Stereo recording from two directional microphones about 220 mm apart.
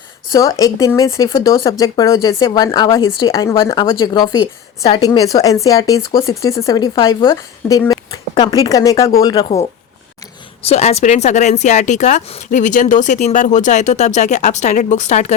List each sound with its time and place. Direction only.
0.3 s speech: 15° left (ahead or behind)
10.6 s speech: 30° left (ahead or behind)